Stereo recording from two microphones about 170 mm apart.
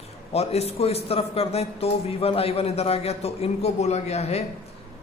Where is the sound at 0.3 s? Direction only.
40° left (ahead or behind).